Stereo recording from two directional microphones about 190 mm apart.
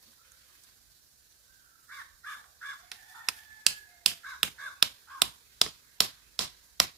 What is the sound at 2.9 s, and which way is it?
Finger snapping, centre (ahead or behind).